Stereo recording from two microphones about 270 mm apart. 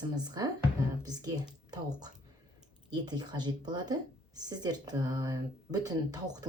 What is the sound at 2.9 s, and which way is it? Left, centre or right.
Speech, centre.